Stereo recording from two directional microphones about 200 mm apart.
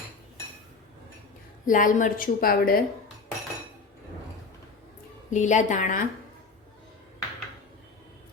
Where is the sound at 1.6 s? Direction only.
40° left (ahead or behind).